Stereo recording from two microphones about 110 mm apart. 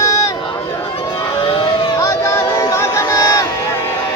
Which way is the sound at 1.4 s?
50° left (ahead or behind).